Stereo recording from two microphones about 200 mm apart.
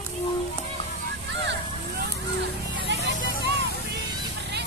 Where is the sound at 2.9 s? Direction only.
60° right (ahead or behind).